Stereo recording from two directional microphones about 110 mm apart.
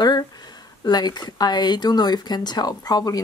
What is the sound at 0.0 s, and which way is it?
Speech, 40° left (ahead or behind).